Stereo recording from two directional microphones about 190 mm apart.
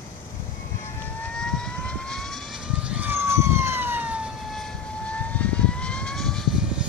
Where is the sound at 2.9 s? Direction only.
10° right (ahead or behind).